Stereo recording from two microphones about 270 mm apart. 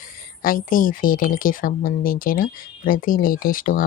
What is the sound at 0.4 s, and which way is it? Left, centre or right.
Speech, left.